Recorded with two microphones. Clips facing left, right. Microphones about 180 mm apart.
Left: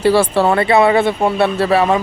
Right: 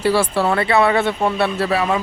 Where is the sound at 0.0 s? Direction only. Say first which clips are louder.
Left 4 dB; 25° left (ahead or behind).